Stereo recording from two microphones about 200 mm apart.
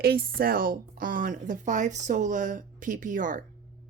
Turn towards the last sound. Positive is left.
turn(degrees=-40)  # may be behind; listen again after turning